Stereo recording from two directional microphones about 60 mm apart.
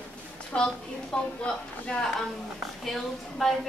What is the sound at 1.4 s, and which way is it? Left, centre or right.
Speech, centre.